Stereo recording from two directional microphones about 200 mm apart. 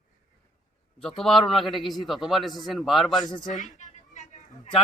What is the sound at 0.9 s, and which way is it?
A man's voice, centre (ahead or behind).